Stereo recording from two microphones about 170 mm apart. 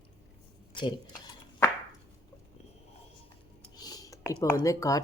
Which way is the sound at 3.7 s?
20° left (ahead or behind).